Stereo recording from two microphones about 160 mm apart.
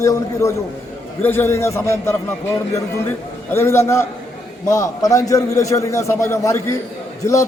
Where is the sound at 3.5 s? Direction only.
15° left (ahead or behind).